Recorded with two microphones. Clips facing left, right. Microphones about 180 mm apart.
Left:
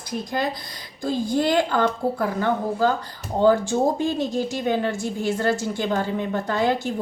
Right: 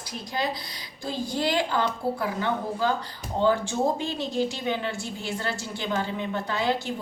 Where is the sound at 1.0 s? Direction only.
50° left (ahead or behind).